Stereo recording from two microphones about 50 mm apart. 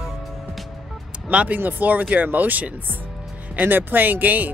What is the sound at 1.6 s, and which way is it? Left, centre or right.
Speech, right.